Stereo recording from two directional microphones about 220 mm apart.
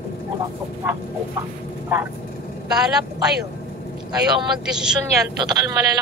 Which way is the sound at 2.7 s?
5° right (ahead or behind).